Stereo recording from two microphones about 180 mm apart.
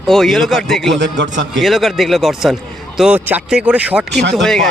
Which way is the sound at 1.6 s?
Centre (ahead or behind).